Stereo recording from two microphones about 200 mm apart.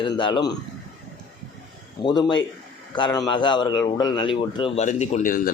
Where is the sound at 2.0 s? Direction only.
20° left (ahead or behind); by 5.5 s 45° left (ahead or behind).